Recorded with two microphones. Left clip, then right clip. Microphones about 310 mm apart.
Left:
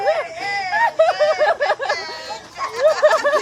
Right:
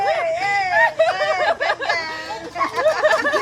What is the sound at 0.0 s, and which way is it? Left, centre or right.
Baby cry, left.